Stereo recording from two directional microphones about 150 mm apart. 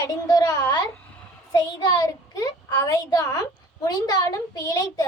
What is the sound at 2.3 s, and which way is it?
A woman's voice, 25° left (ahead or behind).